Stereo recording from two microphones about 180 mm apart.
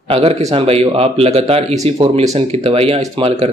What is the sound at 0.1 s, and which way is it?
A man's voice, 35° right (ahead or behind).